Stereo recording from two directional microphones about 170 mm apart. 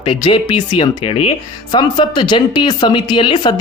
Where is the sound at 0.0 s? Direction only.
30° left (ahead or behind).